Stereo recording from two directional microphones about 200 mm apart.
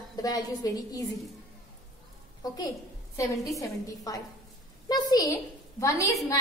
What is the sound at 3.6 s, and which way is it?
A woman's voice, 15° left (ahead or behind).